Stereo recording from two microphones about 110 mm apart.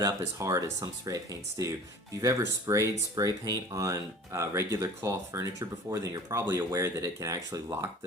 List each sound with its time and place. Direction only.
0.0 s speech: 30° right (ahead or behind)